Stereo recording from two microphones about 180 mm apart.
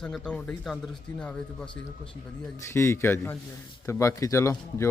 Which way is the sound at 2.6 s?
15° left (ahead or behind).